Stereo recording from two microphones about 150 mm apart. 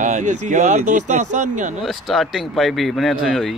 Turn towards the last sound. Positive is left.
turn(degrees=0)  # may be behind; listen again after turning